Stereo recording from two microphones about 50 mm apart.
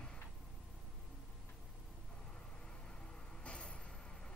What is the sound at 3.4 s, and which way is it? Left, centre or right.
Vehicle, left.